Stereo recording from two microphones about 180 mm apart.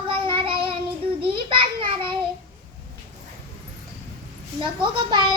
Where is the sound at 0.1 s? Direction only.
30° right (ahead or behind).